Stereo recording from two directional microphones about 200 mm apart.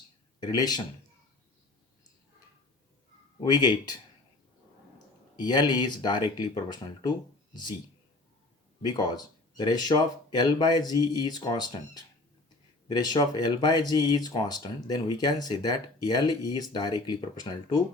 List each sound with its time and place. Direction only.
0.3 s speech: 20° left (ahead or behind)
3.4 s speech: 20° left (ahead or behind)
5.4 s speech: 20° left (ahead or behind)
8.8 s speech: 20° left (ahead or behind)